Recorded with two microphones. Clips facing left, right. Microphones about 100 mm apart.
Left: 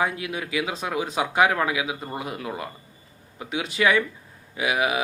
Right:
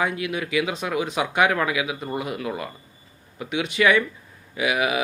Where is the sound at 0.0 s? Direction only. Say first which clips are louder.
Right 1 dB; 35° left (ahead or behind).